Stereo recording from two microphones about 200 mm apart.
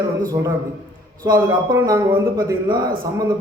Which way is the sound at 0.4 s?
10° right (ahead or behind).